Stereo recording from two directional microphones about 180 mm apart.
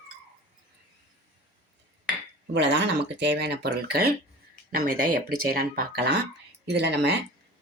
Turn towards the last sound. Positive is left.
turn(degrees=-70)  # may be behind; listen again after turning